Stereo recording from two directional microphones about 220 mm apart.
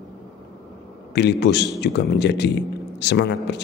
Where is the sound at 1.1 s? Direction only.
50° left (ahead or behind).